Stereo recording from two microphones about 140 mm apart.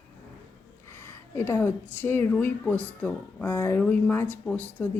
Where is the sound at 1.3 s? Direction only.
15° left (ahead or behind).